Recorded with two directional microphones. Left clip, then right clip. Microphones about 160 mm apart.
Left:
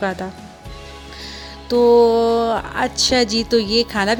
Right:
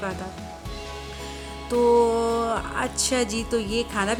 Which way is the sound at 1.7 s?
25° left (ahead or behind).